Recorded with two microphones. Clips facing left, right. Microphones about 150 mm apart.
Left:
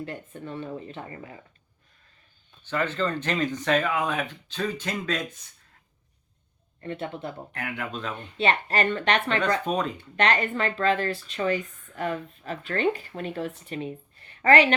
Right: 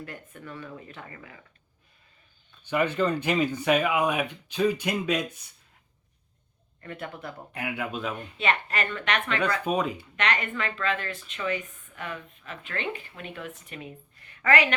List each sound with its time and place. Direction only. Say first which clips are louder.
0.0 s speech: left 5 dB; 25° left (ahead or behind)
2.6 s speech: right 2 dB; 15° right (ahead or behind)
6.8 s speech: left 5 dB; 25° left (ahead or behind)
7.5 s speech: right 5 dB; 10° right (ahead or behind)
8.4 s speech: left 4 dB; 30° left (ahead or behind)
9.6 s speech: even; 10° right (ahead or behind)
10.2 s speech: left 5 dB; 35° left (ahead or behind)